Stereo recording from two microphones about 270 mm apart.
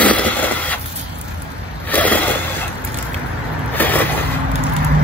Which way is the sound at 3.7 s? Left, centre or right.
Centre.